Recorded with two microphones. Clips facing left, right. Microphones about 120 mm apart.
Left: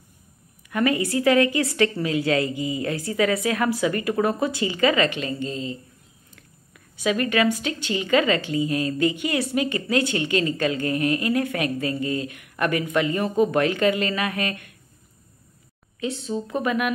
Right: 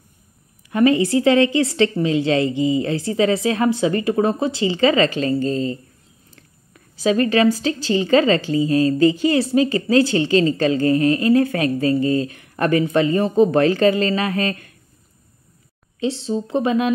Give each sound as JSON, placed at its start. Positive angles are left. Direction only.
{"t": 0.7, "sound": "a woman's voice", "side_deg": -25}
{"t": 16.0, "sound": "a woman's voice", "side_deg": -30}